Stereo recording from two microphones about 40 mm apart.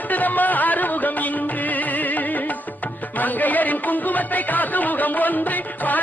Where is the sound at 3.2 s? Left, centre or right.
Left.